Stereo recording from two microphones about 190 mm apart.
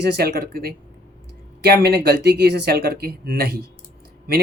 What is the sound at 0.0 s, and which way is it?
Speech, 60° right (ahead or behind).